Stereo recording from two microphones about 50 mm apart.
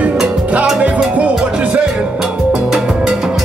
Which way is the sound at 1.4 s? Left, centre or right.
Right.